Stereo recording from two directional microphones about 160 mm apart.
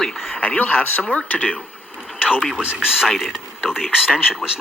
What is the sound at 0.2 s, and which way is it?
Speech, 10° left (ahead or behind).